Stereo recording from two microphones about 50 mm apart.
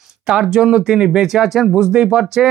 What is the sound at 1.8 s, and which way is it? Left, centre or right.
Speech, centre.